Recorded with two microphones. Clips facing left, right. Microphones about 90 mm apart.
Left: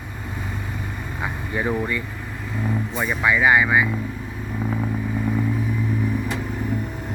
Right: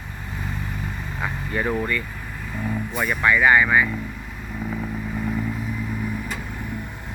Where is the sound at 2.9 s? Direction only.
25° left (ahead or behind).